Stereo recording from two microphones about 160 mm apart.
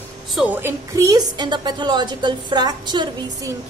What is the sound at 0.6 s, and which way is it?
A woman's voice, 20° right (ahead or behind).